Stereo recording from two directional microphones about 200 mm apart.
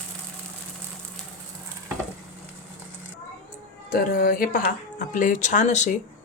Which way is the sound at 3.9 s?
45° left (ahead or behind).